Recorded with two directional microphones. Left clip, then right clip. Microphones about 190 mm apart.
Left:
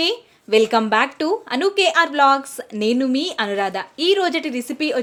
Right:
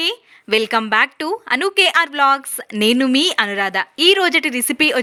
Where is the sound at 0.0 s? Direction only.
15° right (ahead or behind).